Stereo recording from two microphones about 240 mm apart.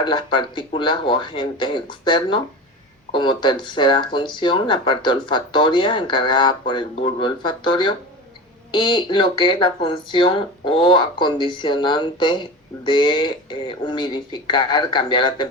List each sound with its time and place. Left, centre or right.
0.0 s speech: centre